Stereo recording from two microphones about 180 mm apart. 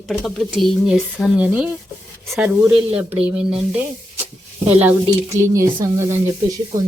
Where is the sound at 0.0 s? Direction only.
Centre (ahead or behind); by 6.1 s 15° right (ahead or behind).